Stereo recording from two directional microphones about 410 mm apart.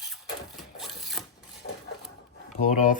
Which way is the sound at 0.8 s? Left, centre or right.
Centre.